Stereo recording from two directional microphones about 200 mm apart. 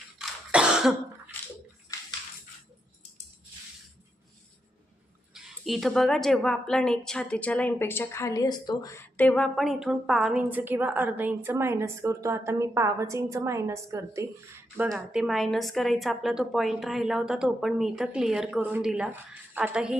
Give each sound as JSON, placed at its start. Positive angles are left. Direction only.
{"t": 0.2, "sound": "cough", "side_deg": -5}
{"t": 1.9, "sound": "bathtub", "side_deg": 15}
{"t": 5.3, "sound": "a woman's voice", "side_deg": 0}
{"t": 14.9, "sound": "a woman's voice", "side_deg": 0}